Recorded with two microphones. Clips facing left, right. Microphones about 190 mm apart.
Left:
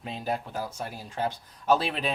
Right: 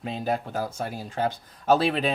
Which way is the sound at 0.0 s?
50° right (ahead or behind).